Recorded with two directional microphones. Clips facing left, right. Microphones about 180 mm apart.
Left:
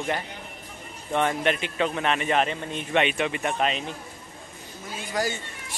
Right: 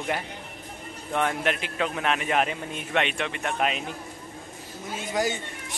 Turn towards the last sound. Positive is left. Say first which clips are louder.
# right 1 dB
turn(degrees=-20)  # may be behind; listen again after turning